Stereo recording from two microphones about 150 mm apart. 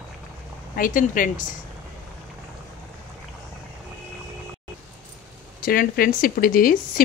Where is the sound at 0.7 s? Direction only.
65° left (ahead or behind).